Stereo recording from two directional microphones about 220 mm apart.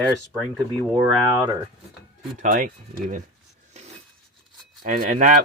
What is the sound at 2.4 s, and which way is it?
Speech, 35° right (ahead or behind).